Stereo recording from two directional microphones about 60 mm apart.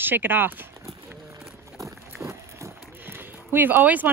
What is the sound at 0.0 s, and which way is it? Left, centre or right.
Speech, right.